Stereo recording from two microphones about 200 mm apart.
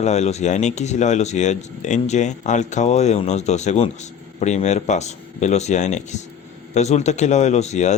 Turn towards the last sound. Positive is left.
turn(degrees=35)  # may be behind; listen again after turning